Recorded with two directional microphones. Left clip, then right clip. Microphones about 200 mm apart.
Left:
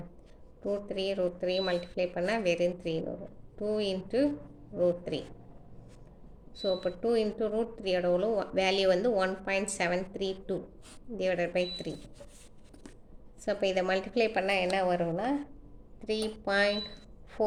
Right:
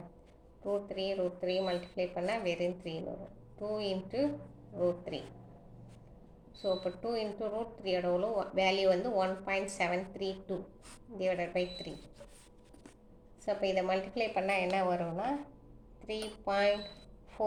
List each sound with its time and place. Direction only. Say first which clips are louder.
0.6 s a woman's voice: left 2 dB; 50° left (ahead or behind)
6.6 s a woman's voice: left 4 dB; 50° left (ahead or behind)
13.4 s a woman's voice: left 3 dB; 50° left (ahead or behind)